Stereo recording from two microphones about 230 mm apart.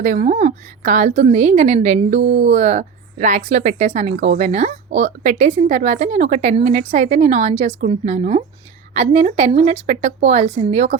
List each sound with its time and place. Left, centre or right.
0.0 s a woman's voice: right